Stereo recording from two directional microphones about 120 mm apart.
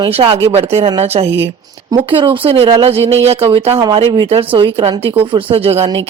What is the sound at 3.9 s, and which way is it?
A woman's voice, 45° right (ahead or behind).